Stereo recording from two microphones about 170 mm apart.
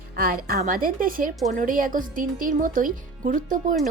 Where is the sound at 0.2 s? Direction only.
60° right (ahead or behind).